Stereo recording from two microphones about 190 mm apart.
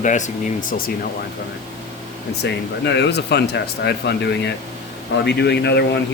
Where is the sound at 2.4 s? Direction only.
65° left (ahead or behind).